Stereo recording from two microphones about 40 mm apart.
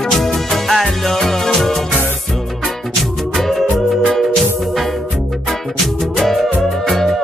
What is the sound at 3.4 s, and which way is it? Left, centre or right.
Music, centre.